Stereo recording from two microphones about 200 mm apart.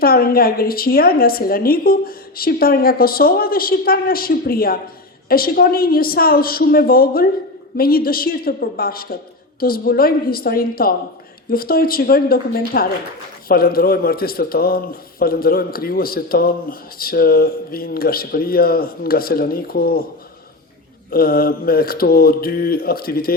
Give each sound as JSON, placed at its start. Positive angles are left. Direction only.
{"t": 0.0, "sound": "a man's voice", "side_deg": 50}
{"t": 21.1, "sound": "a man's voice", "side_deg": 50}